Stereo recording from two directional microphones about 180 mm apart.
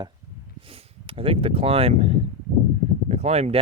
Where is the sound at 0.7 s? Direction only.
30° right (ahead or behind).